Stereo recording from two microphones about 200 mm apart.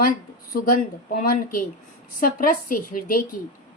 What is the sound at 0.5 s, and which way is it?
A woman's voice, 45° left (ahead or behind).